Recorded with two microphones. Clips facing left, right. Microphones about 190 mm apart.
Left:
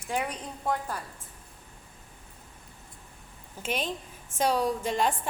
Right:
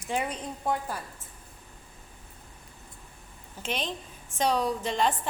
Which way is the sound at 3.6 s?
10° left (ahead or behind).